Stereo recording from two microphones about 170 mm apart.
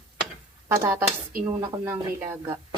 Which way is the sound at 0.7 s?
15° right (ahead or behind).